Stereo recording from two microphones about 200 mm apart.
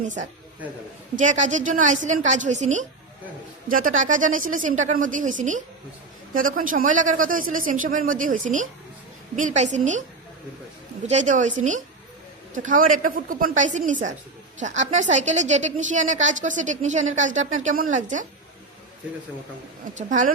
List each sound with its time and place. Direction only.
0.0 s a woman's voice: 40° right (ahead or behind)
11.0 s a woman's voice: 35° right (ahead or behind)
19.9 s a woman's voice: 40° right (ahead or behind)